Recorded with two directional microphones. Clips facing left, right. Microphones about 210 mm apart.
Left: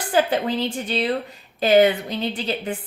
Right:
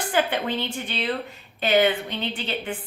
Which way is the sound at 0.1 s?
35° left (ahead or behind).